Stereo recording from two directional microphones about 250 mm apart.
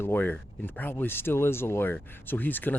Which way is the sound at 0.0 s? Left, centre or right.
Centre.